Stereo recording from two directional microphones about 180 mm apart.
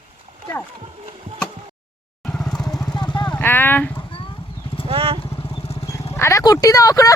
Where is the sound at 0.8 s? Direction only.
30° right (ahead or behind).